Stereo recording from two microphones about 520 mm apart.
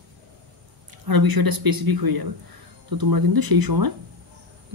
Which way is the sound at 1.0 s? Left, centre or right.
Right.